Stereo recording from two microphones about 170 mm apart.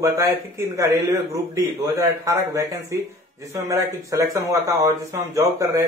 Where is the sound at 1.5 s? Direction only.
15° right (ahead or behind).